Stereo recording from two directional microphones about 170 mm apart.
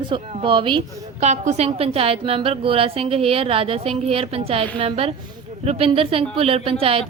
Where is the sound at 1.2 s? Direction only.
40° right (ahead or behind).